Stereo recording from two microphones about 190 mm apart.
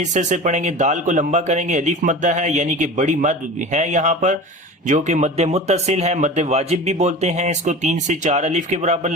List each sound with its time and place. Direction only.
0.1 s speech: 40° right (ahead or behind)